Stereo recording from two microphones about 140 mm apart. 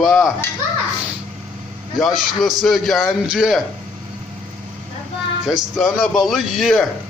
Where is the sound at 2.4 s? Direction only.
Centre (ahead or behind).